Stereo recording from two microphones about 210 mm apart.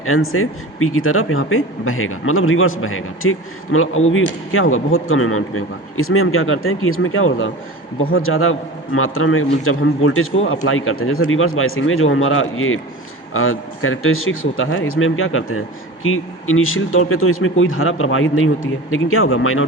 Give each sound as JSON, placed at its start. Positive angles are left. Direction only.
{"t": 0.0, "sound": "a man's voice", "side_deg": 85}